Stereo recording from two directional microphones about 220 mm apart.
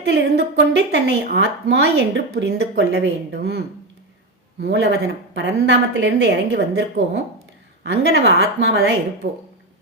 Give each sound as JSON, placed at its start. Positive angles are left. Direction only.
{"t": 0.0, "sound": "a woman's voice", "side_deg": -50}
{"t": 4.6, "sound": "a woman's voice", "side_deg": -50}